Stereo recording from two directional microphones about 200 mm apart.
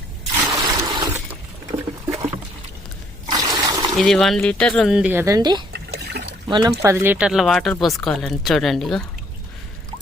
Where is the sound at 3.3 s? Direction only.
20° right (ahead or behind).